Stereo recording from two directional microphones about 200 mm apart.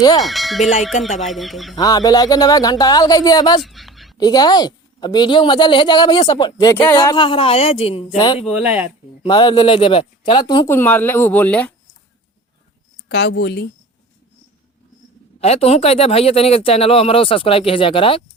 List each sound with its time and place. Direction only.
0.2 s speech: centre (ahead or behind)
1.7 s speech: 20° left (ahead or behind)
3.6 s a sound: centre (ahead or behind)
4.2 s speech: 20° left (ahead or behind)
8.4 s speech: 5° right (ahead or behind)
9.2 s speech: 25° left (ahead or behind); by 11.7 s 5° left (ahead or behind)
13.1 s speech: 55° left (ahead or behind)
15.4 s speech: 30° left (ahead or behind)